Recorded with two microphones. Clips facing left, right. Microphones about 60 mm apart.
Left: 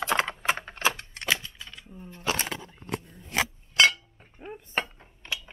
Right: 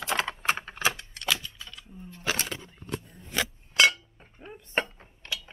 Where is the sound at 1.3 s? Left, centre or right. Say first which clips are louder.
Left 2 dB; left.